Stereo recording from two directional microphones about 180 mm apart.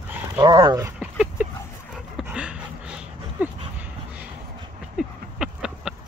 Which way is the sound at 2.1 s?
5° right (ahead or behind).